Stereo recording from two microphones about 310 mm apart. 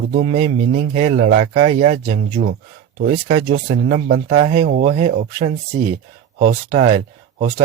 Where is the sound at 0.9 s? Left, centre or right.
Right.